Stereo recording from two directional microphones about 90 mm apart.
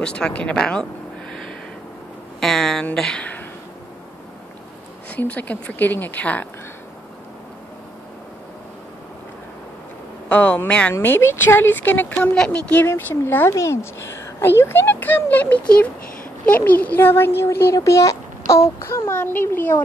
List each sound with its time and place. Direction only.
0.0 s a woman's voice: 10° left (ahead or behind)
2.4 s speech: 5° left (ahead or behind)
5.1 s a woman's voice: 20° left (ahead or behind)
10.2 s a woman's voice: 15° left (ahead or behind)
11.0 s a woman's voice: 25° left (ahead or behind)
12.7 s a woman's voice: 25° left (ahead or behind)